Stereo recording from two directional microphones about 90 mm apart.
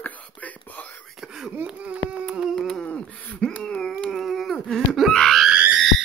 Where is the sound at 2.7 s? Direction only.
10° left (ahead or behind).